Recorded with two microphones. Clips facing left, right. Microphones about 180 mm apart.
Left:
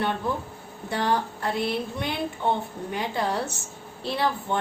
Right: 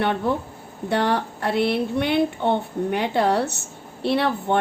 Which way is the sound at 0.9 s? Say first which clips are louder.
Right 4 dB; 65° right (ahead or behind).